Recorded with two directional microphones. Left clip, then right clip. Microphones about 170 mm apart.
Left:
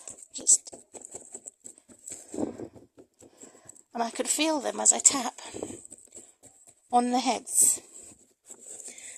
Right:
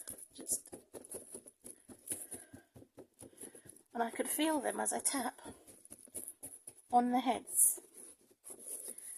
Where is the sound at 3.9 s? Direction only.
35° left (ahead or behind).